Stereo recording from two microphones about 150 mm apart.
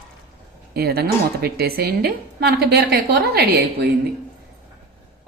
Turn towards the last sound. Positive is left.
turn(degrees=-90)